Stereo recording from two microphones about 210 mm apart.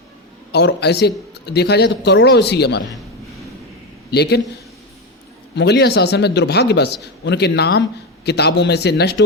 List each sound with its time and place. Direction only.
0.5 s a man's voice: 50° left (ahead or behind)
4.1 s a man's voice: 50° left (ahead or behind)
5.5 s a man's voice: 55° left (ahead or behind)